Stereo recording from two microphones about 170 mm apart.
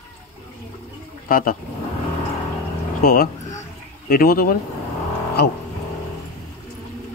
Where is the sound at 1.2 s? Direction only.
55° left (ahead or behind).